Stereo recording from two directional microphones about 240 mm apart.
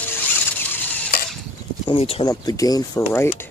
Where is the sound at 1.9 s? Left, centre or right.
Left.